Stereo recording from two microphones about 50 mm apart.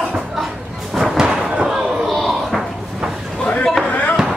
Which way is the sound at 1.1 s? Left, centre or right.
Centre.